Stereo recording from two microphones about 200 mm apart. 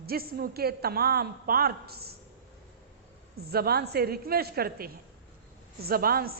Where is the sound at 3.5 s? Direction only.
50° right (ahead or behind).